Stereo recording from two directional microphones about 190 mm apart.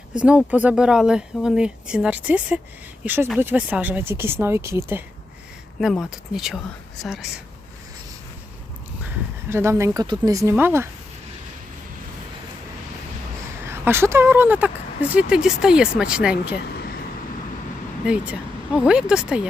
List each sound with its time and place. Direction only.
0.1 s speech: 5° right (ahead or behind)
5.8 s speech: centre (ahead or behind)
9.5 s speech: 15° right (ahead or behind)
13.7 s speech: 10° right (ahead or behind)
16.7 s vehicle: 55° left (ahead or behind)
18.0 s speech: 5° right (ahead or behind)